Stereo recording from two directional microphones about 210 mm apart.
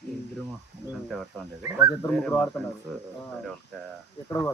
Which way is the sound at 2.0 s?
5° left (ahead or behind).